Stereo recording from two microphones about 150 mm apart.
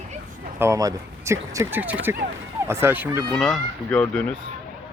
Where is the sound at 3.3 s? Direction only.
5° left (ahead or behind).